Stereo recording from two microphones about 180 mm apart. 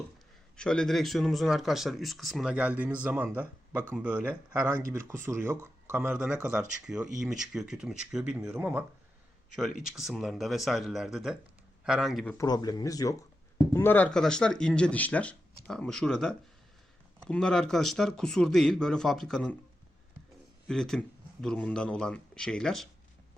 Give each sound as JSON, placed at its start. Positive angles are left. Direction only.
{"t": 0.5, "sound": "speech", "side_deg": 5}
{"t": 12.5, "sound": "speech", "side_deg": 20}
{"t": 20.7, "sound": "speech", "side_deg": 0}